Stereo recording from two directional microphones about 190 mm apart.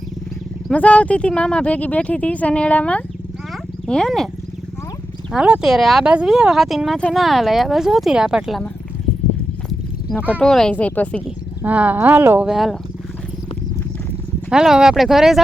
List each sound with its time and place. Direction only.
0.7 s speech: 5° left (ahead or behind)
5.3 s speech: 5° right (ahead or behind)
9.6 s horse: 5° left (ahead or behind)
10.4 s speech: 5° left (ahead or behind)
11.6 s speech: 10° right (ahead or behind)
14.5 s speech: 5° right (ahead or behind)